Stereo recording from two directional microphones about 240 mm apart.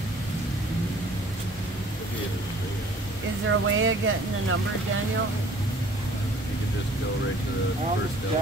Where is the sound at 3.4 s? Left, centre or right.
Right.